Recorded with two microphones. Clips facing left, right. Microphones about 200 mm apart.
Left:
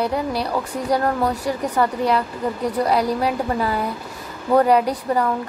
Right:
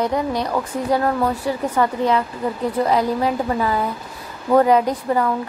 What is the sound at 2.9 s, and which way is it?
Speech, 15° left (ahead or behind).